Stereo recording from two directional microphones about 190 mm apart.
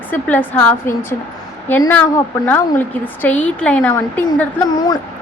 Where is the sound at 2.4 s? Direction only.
10° left (ahead or behind).